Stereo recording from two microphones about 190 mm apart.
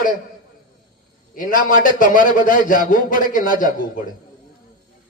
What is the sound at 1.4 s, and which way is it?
A man's voice, 45° left (ahead or behind).